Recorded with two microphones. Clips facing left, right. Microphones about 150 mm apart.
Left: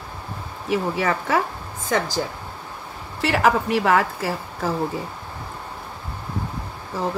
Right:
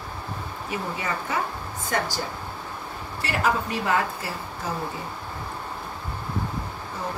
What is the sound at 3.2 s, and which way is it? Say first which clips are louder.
A woman's voice: left 6 dB; 90° left.